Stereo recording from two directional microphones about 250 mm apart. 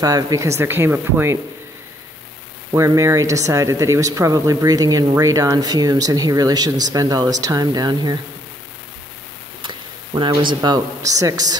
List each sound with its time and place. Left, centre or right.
0.0 s speech: centre
2.7 s speech: centre
9.6 s speech: centre